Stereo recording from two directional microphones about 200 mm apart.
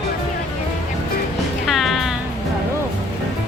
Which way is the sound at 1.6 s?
Centre (ahead or behind).